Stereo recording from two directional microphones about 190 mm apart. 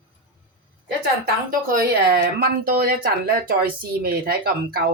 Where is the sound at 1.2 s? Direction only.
50° right (ahead or behind).